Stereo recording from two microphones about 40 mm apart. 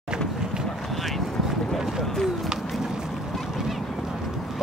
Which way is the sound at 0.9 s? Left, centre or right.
Centre.